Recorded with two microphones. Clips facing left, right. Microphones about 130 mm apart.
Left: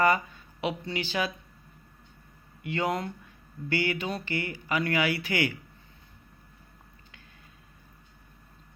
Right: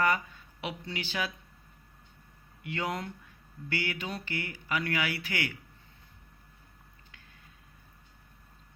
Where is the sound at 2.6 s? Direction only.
Centre (ahead or behind).